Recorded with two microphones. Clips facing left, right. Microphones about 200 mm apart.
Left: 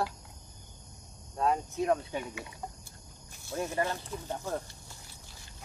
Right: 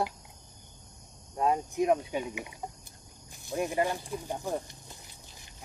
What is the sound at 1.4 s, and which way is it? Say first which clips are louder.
Speech: right 2 dB; 15° right (ahead or behind).